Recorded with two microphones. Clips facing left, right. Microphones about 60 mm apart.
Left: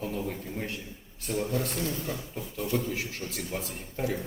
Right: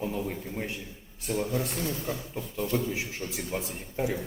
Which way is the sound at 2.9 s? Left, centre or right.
Centre.